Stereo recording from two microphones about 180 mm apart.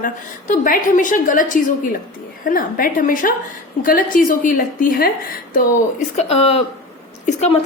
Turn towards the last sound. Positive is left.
turn(degrees=40)  # may be behind; listen again after turning